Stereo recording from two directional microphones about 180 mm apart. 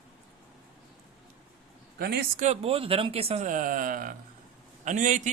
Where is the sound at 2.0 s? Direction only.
60° right (ahead or behind).